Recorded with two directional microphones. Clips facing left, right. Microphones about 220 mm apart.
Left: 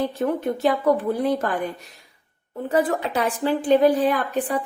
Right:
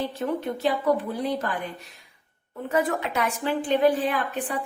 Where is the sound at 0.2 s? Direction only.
50° left (ahead or behind).